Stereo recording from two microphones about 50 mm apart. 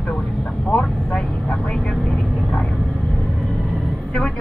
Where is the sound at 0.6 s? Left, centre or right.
Left.